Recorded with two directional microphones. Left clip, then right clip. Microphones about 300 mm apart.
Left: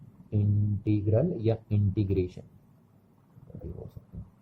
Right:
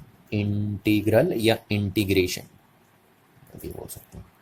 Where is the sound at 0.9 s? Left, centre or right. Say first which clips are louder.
Right 8 dB; centre.